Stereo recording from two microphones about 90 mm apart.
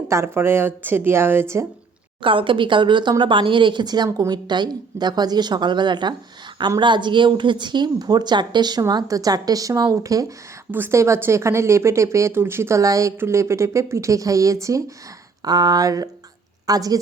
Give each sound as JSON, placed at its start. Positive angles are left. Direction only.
{"t": 0.1, "sound": "speech", "side_deg": -30}
{"t": 2.2, "sound": "speech", "side_deg": -75}
{"t": 10.7, "sound": "speech", "side_deg": -25}